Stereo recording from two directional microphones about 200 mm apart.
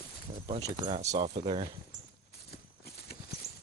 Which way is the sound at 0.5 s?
20° right (ahead or behind).